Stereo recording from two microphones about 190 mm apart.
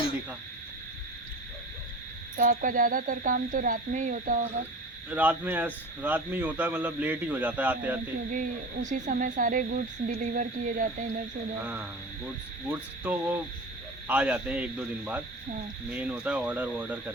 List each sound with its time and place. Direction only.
2.4 s speech: 45° right (ahead or behind)
5.1 s a man's voice: 10° right (ahead or behind)
8.3 s speech: 40° right (ahead or behind)
12.7 s a man's voice: 10° right (ahead or behind)